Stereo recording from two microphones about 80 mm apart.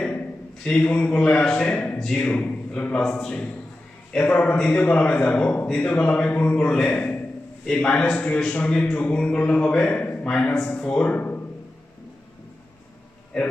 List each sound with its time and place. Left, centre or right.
0.6 s a man's voice: centre
10.3 s a man's voice: centre